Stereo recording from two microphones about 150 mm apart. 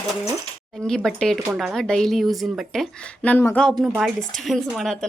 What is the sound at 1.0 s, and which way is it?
Speech, 5° left (ahead or behind).